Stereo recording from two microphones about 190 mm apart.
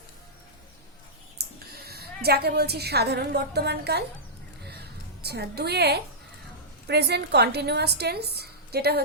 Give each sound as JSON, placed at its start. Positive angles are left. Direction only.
{"t": 1.4, "sound": "a woman's voice", "side_deg": -55}
{"t": 4.7, "sound": "a sound", "side_deg": -55}
{"t": 6.8, "sound": "a woman's voice", "side_deg": -60}